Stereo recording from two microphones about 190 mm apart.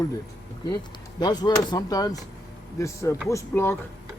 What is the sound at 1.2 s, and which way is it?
Speech, 20° left (ahead or behind).